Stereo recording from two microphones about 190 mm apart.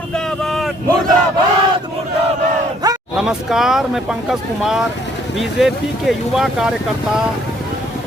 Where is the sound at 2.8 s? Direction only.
20° right (ahead or behind).